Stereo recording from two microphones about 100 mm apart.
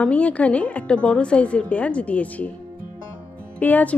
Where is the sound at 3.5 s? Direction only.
15° left (ahead or behind).